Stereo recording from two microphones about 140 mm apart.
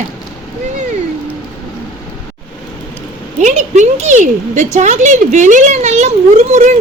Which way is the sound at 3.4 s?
60° right (ahead or behind).